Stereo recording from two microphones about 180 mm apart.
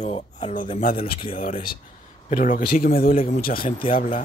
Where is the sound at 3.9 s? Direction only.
50° left (ahead or behind).